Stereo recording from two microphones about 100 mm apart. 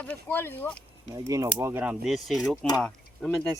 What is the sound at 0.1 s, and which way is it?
Speech, 20° left (ahead or behind).